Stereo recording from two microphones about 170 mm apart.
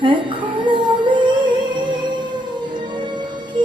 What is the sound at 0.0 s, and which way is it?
Music, 30° right (ahead or behind).